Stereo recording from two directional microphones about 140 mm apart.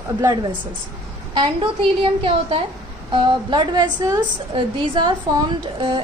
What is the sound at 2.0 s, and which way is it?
A woman's voice, 40° right (ahead or behind).